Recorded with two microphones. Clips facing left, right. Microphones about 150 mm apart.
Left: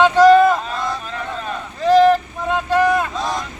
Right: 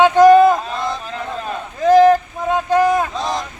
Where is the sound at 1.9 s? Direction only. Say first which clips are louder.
Right 1 dB; 15° right (ahead or behind).